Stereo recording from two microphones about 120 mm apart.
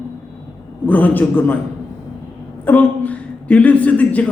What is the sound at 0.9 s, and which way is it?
Speech, 15° left (ahead or behind).